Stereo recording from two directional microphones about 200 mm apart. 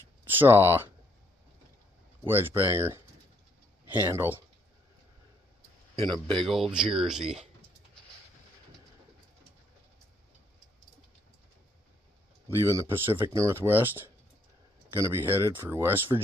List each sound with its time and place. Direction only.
0.3 s speech: 10° right (ahead or behind)
2.2 s speech: 10° right (ahead or behind)
4.1 s speech: 10° right (ahead or behind)
6.0 s speech: 20° right (ahead or behind)
6.5 s speech: centre (ahead or behind)
12.4 s speech: 15° right (ahead or behind)